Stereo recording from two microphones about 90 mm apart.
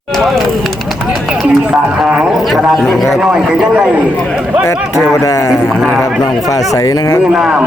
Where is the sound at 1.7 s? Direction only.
5° right (ahead or behind).